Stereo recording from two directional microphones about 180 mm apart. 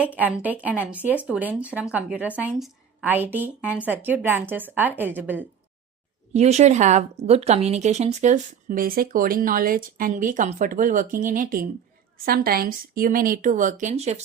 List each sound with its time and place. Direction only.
0.0 s a woman's voice: 10° right (ahead or behind)
6.3 s a woman's voice: 40° right (ahead or behind)